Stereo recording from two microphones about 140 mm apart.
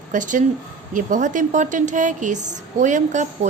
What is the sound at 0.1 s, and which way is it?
A woman's voice, 65° right (ahead or behind).